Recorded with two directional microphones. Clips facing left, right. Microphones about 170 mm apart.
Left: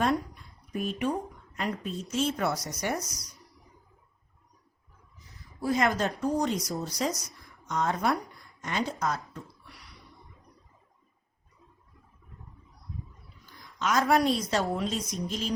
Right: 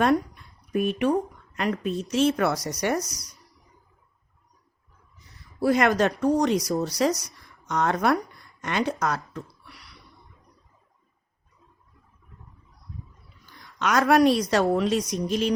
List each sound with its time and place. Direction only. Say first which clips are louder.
0.7 s a woman's voice: right 7 dB; 70° right (ahead or behind)
5.5 s a woman's voice: right 6 dB; 70° right (ahead or behind)
13.4 s a woman's voice: right 4 dB; 70° right (ahead or behind)